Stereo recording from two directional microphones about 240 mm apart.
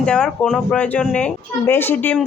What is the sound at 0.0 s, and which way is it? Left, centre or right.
Speech, centre.